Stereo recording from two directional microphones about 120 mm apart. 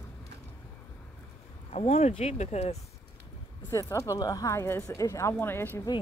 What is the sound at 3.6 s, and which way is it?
Speech, 25° left (ahead or behind).